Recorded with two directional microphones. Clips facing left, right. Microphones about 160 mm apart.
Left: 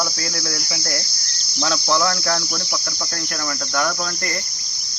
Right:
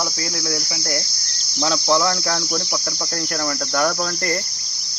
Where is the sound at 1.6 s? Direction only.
20° right (ahead or behind).